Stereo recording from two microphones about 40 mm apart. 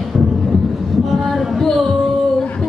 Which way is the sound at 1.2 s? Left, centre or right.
Centre.